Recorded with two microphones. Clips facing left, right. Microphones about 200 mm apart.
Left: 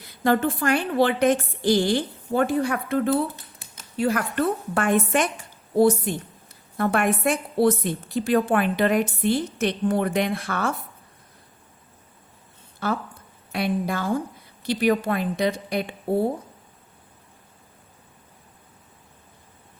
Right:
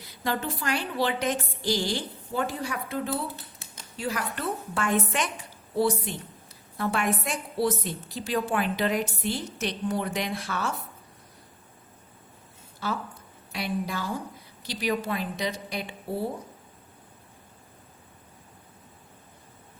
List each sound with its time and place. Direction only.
0.3 s a woman's voice: 55° left (ahead or behind)
13.5 s a woman's voice: 55° left (ahead or behind)